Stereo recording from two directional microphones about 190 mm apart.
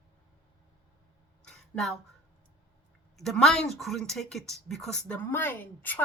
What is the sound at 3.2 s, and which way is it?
A woman's voice, centre (ahead or behind).